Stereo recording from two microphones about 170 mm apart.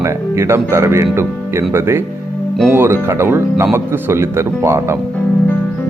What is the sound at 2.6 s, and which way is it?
Speech, 15° right (ahead or behind).